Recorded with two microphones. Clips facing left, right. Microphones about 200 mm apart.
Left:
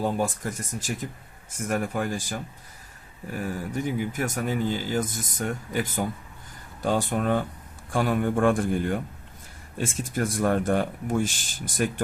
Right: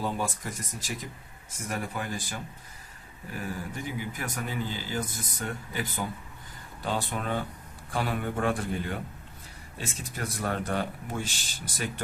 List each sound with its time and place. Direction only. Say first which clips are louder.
0.0 s speech: left 5 dB; 45° left (ahead or behind)